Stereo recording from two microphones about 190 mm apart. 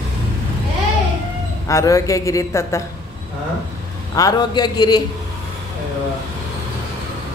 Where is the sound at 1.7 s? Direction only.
15° left (ahead or behind).